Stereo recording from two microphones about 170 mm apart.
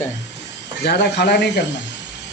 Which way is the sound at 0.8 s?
75° left (ahead or behind).